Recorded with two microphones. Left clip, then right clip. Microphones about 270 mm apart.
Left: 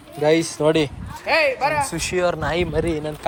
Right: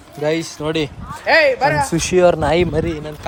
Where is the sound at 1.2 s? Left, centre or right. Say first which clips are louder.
Right 5 dB; right.